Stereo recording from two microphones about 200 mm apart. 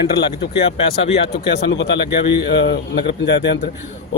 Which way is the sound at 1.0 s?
30° left (ahead or behind).